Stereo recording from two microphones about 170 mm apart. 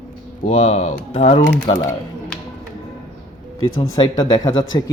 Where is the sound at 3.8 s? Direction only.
25° left (ahead or behind).